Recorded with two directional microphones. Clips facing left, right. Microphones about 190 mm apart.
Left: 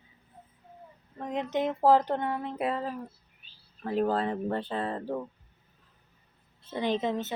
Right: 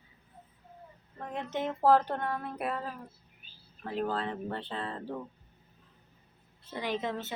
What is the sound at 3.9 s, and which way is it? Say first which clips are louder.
Speech: left 5 dB; 45° left (ahead or behind).